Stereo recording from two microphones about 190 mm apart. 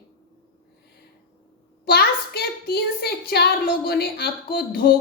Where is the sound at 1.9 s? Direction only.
55° left (ahead or behind).